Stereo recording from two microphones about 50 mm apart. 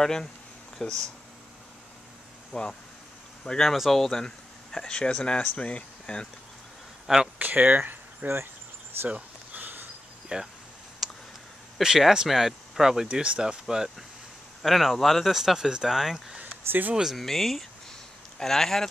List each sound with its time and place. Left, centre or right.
0.0 s speech: centre
2.5 s speech: left
3.6 s speech: centre
4.7 s speech: centre
7.3 s a sound: right
10.2 s speech: centre
11.0 s a sound: centre
11.8 s speech: centre
16.6 s speech: right
16.9 s speech: centre
17.2 s speech: centre